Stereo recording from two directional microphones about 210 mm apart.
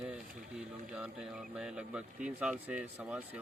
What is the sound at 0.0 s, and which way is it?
Speech, 5° right (ahead or behind).